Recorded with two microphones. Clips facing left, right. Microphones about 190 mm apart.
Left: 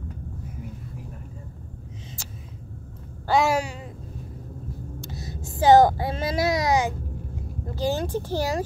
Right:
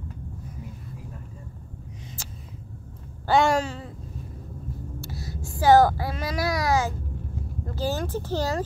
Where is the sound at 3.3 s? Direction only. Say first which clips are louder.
Right 1 dB; 5° left (ahead or behind).